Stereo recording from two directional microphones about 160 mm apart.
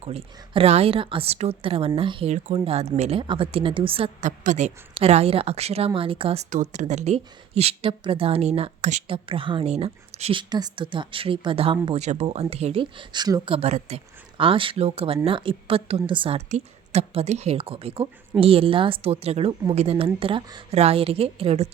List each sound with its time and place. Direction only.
0.0 s speech: 40° right (ahead or behind)
4.3 s a woman's voice: 50° right (ahead or behind)
6.5 s speech: 50° right (ahead or behind)
10.5 s speech: 30° right (ahead or behind)
11.9 s speech: 45° right (ahead or behind)